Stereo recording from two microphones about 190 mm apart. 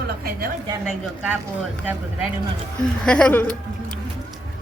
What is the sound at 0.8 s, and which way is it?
Speech, 5° right (ahead or behind).